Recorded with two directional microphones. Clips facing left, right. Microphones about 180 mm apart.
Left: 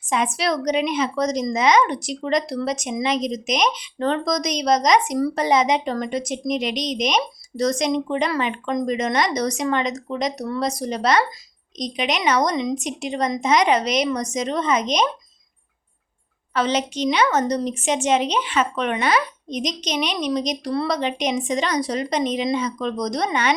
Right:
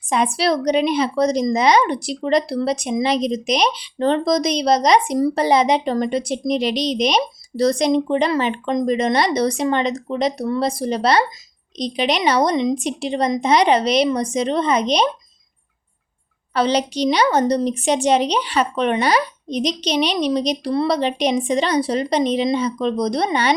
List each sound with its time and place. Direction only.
0.1 s a woman's voice: 35° right (ahead or behind)
16.6 s a woman's voice: 35° right (ahead or behind)